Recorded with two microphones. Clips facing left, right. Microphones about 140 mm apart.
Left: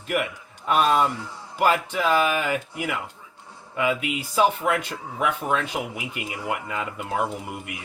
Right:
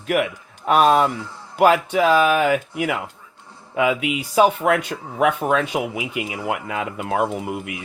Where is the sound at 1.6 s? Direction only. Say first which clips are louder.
Right 6 dB; 90° right.